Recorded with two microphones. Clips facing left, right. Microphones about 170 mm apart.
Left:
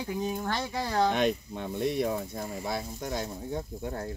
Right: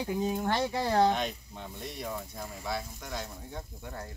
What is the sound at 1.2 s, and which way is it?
Speech, 65° left (ahead or behind).